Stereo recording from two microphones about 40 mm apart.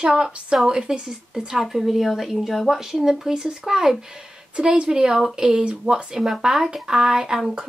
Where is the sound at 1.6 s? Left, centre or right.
Centre.